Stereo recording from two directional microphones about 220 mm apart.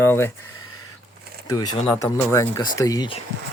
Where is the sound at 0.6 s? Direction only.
80° left.